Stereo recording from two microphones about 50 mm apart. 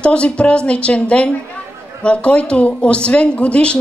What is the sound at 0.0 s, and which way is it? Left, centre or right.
Speech, left.